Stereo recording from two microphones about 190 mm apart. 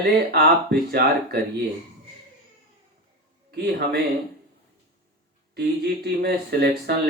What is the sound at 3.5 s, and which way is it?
Speech, 55° right (ahead or behind).